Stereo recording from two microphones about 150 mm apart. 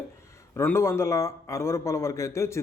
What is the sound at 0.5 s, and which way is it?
A man's voice, 15° left (ahead or behind).